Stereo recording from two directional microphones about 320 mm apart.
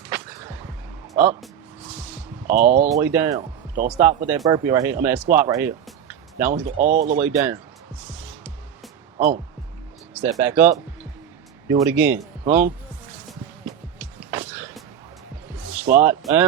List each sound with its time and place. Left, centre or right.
1.1 s music: right
2.0 s a sound: centre
2.6 s speech: right
2.9 s speech: centre
6.5 s speech: right
7.1 s music: centre
10.2 s a man's voice: centre
14.3 s music: centre
16.0 s speech: centre